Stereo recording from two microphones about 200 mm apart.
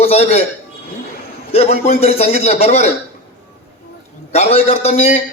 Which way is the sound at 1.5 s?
30° left (ahead or behind).